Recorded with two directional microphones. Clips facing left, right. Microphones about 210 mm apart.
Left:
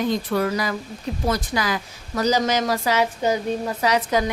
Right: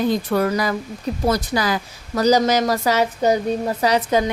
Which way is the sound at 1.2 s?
35° right (ahead or behind).